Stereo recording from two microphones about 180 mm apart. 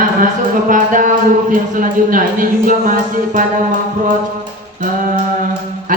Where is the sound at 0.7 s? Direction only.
50° right (ahead or behind).